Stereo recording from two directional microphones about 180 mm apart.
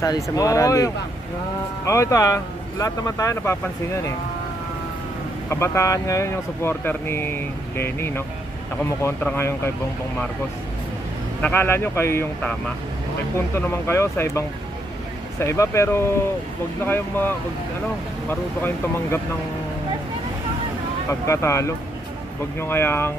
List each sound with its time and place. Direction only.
0.0 s speech: 20° left (ahead or behind)
5.5 s speech: 15° left (ahead or behind)
11.4 s speech: 10° left (ahead or behind)
13.6 s speech: 15° left (ahead or behind)
21.1 s speech: 15° left (ahead or behind)